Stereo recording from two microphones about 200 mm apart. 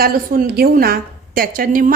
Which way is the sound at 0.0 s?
50° right (ahead or behind).